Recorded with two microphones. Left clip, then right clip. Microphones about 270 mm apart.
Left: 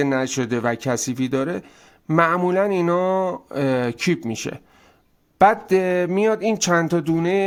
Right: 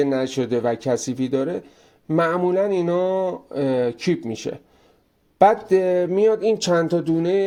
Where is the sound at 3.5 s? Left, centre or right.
Left.